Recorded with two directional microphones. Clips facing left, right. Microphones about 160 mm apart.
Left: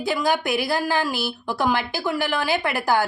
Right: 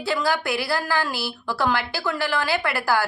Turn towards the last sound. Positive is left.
turn(degrees=20)  # may be behind; listen again after turning